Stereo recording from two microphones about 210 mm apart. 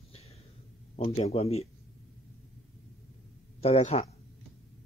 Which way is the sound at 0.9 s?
30° left (ahead or behind).